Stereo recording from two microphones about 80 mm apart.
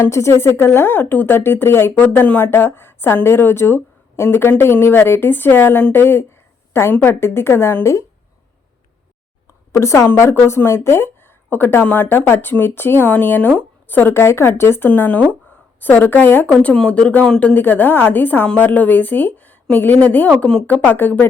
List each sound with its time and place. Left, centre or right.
0.0 s a woman's voice: left
9.7 s a woman's voice: left
16.5 s speech: centre
17.5 s a woman's voice: left
20.7 s a woman's voice: left